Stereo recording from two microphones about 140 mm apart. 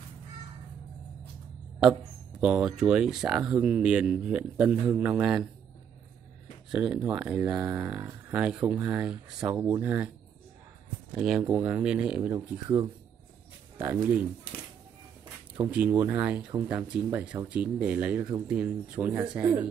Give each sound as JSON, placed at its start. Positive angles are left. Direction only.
{"t": 2.4, "sound": "speech", "side_deg": -5}
{"t": 6.7, "sound": "speech", "side_deg": -5}
{"t": 11.1, "sound": "speech", "side_deg": -5}
{"t": 15.5, "sound": "speech", "side_deg": -15}